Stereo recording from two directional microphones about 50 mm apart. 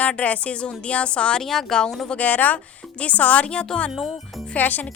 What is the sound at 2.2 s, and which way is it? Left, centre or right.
A woman's voice, left.